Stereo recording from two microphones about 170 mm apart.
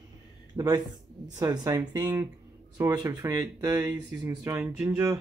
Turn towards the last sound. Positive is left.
turn(degrees=-20)  # may be behind; listen again after turning